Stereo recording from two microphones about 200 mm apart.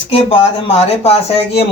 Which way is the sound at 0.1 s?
30° left (ahead or behind).